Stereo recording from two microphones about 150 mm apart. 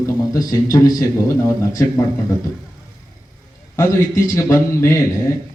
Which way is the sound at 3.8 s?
20° left (ahead or behind).